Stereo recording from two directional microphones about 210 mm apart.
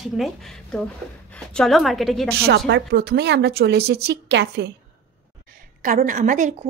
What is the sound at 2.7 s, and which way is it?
Speech, 50° right (ahead or behind).